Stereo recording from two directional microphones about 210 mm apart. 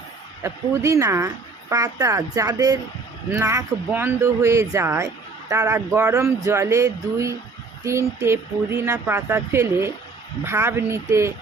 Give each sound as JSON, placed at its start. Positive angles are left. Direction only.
{"t": 0.4, "sound": "speech", "side_deg": -15}